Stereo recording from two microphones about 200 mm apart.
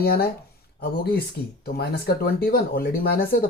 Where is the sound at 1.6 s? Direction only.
50° left (ahead or behind).